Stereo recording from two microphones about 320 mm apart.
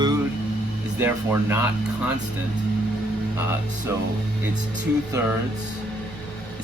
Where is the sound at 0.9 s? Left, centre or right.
Centre.